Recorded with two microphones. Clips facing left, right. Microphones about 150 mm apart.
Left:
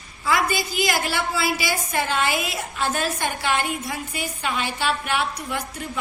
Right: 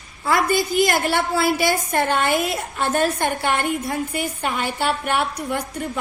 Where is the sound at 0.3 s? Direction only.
50° right (ahead or behind).